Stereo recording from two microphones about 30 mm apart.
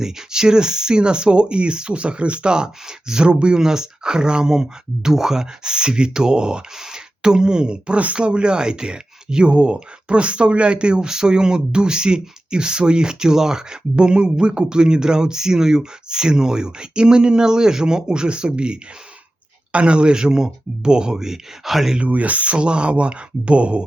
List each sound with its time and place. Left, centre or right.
0.0 s speech: right
3.6 s speech: right
5.7 s speech: right
21.2 s speech: centre
22.0 s speech: right
22.5 s speech: right